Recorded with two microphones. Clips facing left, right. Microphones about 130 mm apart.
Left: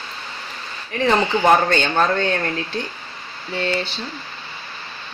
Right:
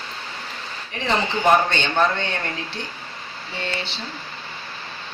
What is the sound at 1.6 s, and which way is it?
Speech, 45° left (ahead or behind).